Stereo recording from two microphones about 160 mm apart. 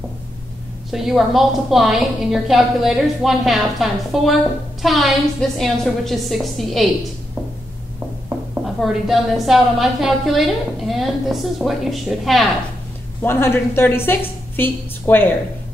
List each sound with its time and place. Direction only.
0.9 s a woman's voice: centre (ahead or behind)
8.8 s a woman's voice: centre (ahead or behind)
13.2 s a woman's voice: 15° left (ahead or behind)